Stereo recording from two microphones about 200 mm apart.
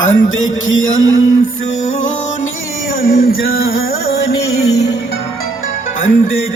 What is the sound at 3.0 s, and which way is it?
Music, 45° left (ahead or behind).